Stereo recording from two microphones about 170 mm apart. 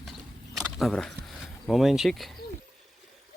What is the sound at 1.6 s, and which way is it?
Speech, centre (ahead or behind).